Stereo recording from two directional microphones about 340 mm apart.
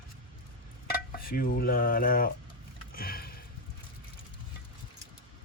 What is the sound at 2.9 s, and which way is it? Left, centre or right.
Sniff, left.